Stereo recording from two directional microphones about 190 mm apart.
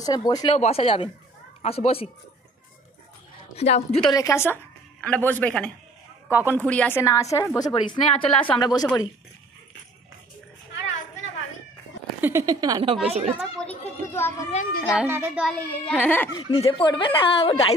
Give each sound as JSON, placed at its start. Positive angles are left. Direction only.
{"t": 0.0, "sound": "speech", "side_deg": 20}
{"t": 0.6, "sound": "speech", "side_deg": 30}
{"t": 3.5, "sound": "speech", "side_deg": 35}
{"t": 4.1, "sound": "a woman's voice", "side_deg": 15}
{"t": 12.2, "sound": "a woman's voice", "side_deg": -15}
{"t": 13.4, "sound": "chatter", "side_deg": 5}
{"t": 14.5, "sound": "a woman's voice", "side_deg": 45}
{"t": 14.9, "sound": "a child's voice", "side_deg": -10}
{"t": 15.4, "sound": "a woman's voice", "side_deg": 5}
{"t": 16.3, "sound": "speech", "side_deg": 30}